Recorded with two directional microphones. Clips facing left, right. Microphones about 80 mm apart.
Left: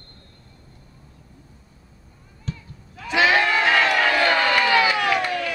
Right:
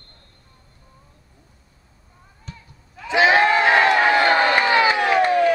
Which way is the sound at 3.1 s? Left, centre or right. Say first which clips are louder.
Right 3 dB; right.